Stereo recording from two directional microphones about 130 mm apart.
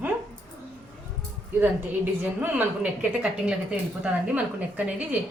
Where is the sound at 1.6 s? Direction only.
15° right (ahead or behind).